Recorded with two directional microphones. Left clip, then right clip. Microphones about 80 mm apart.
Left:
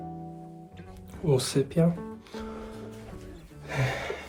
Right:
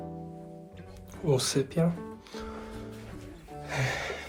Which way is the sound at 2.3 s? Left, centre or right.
Left.